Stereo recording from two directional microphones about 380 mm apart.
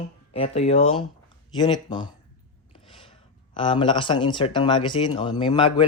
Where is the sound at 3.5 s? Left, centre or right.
Centre.